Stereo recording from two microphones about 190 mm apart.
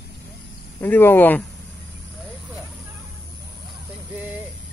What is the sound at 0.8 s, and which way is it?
Speech, 10° left (ahead or behind).